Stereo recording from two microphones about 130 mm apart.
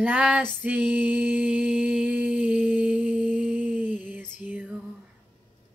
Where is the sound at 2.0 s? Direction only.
10° right (ahead or behind).